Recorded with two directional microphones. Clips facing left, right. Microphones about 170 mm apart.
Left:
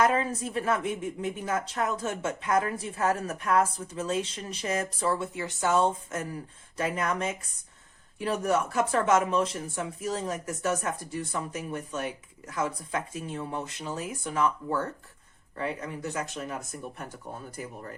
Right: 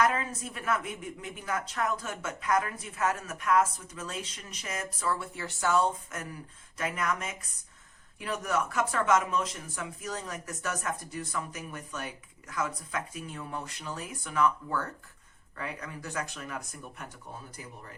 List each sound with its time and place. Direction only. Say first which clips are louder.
0.0 s a woman's voice: left 3 dB; 30° left (ahead or behind)